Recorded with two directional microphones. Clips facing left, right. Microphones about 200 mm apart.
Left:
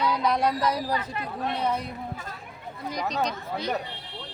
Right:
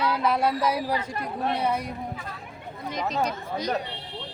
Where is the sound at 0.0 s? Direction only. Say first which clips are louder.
Even; 5° right (ahead or behind).